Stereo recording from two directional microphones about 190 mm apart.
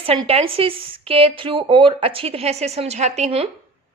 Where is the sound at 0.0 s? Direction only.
30° right (ahead or behind).